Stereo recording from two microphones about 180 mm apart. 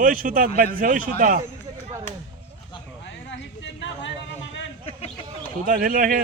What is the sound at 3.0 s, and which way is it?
Speech, 85° left.